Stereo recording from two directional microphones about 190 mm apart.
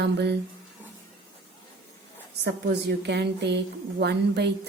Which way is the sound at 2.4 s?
60° right (ahead or behind).